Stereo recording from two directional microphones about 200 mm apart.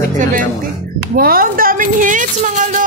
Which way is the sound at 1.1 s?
45° right (ahead or behind).